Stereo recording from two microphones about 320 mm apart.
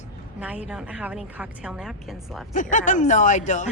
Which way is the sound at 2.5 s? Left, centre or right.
Left.